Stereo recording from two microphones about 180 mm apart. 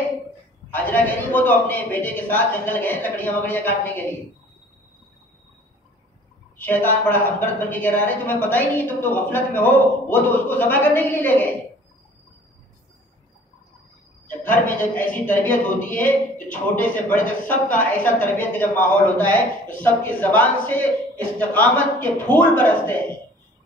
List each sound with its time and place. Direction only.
0.7 s speech: 10° left (ahead or behind)
6.6 s speech: 10° left (ahead or behind)
14.4 s speech: 10° left (ahead or behind)